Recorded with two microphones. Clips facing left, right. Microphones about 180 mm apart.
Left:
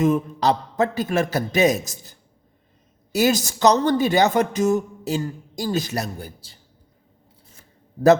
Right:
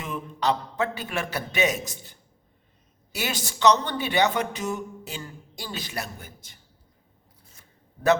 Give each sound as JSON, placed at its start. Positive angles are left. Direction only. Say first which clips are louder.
{"t": 0.0, "sound": "a woman's voice", "louder": "left 9 dB", "side_deg": 40}